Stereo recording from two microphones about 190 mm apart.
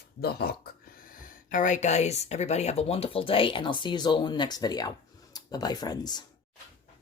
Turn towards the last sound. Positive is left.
turn(degrees=20)  # may be behind; listen again after turning